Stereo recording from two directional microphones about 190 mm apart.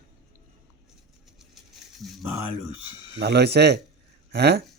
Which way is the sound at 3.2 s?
60° right (ahead or behind).